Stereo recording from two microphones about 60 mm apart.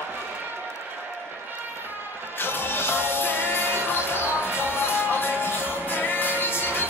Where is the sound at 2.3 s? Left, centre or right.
Left.